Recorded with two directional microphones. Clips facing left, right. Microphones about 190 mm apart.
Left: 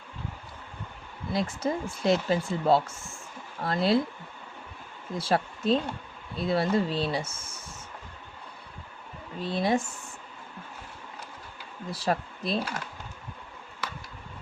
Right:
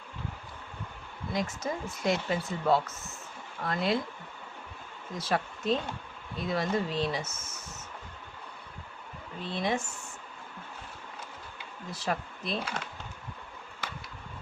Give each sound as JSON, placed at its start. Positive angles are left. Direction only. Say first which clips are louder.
{"t": 1.3, "sound": "speech", "louder": "left 4 dB", "side_deg": 30}
{"t": 5.1, "sound": "speech", "louder": "left 4 dB", "side_deg": 30}
{"t": 9.4, "sound": "speech", "louder": "left 5 dB", "side_deg": 35}
{"t": 11.9, "sound": "speech", "louder": "left 4 dB", "side_deg": 35}